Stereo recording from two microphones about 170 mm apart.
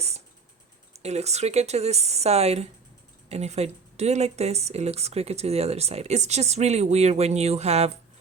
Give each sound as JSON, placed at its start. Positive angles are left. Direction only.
{"t": 1.0, "sound": "speech", "side_deg": -40}